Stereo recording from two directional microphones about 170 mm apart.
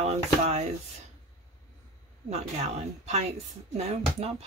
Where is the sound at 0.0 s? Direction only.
40° right (ahead or behind).